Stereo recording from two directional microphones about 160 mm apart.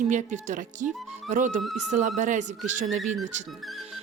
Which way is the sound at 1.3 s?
50° right (ahead or behind).